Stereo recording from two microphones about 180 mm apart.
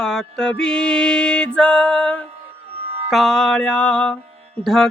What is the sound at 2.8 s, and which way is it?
Music, 35° right (ahead or behind).